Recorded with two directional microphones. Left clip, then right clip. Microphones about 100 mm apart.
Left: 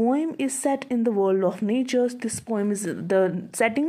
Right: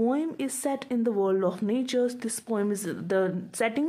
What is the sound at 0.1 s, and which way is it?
Speech, 35° left (ahead or behind).